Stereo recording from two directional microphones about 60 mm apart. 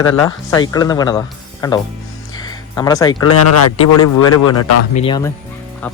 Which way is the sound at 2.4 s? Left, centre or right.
Left.